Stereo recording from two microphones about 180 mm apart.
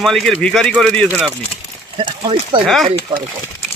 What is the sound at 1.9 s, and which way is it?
Speech, 30° right (ahead or behind).